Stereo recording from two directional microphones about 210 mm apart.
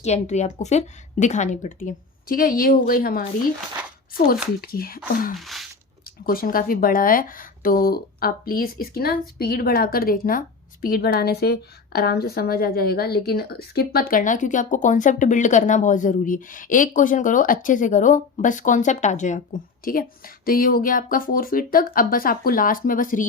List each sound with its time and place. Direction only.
0.0 s speech: 30° left (ahead or behind)
4.6 s speech: 45° left (ahead or behind)
5.4 s a sound: centre (ahead or behind)
6.2 s speech: 45° left (ahead or behind)